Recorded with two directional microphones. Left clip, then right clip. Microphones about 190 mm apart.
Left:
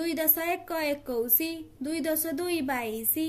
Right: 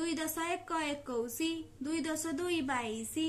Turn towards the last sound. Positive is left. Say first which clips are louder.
# left 4 dB
turn(degrees=15)  # may be behind; listen again after turning